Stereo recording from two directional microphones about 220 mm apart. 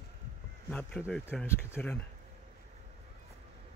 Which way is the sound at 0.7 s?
5° left (ahead or behind).